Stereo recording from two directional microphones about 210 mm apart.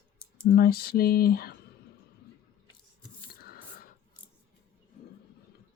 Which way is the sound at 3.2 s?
45° left (ahead or behind).